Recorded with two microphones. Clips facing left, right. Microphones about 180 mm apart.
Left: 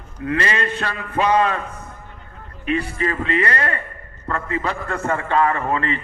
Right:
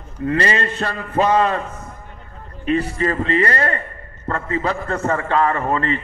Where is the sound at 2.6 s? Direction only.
35° right (ahead or behind).